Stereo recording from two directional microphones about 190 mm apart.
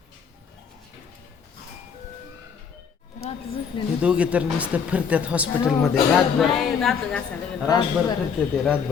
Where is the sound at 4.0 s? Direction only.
5° right (ahead or behind).